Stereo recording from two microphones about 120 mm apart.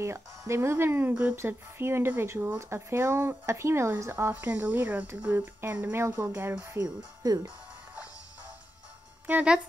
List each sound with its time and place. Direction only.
0.0 s speech: 25° right (ahead or behind)
9.2 s speech: 10° right (ahead or behind)